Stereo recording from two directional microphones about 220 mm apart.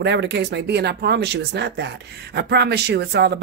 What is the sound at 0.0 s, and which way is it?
Speech, 50° right (ahead or behind).